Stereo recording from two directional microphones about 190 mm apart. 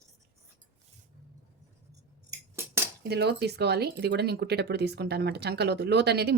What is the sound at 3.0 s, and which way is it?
Speech, 60° right (ahead or behind).